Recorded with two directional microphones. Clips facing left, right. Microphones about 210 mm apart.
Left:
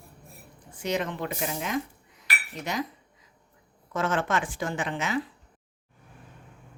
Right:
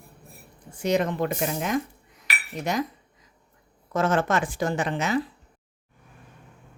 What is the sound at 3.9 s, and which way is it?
Speech, 40° right (ahead or behind).